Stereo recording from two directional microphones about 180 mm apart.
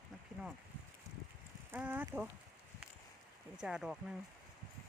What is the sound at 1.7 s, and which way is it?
Speech, 10° right (ahead or behind).